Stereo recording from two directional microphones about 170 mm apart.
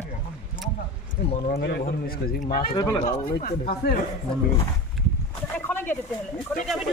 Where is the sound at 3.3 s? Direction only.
60° left (ahead or behind).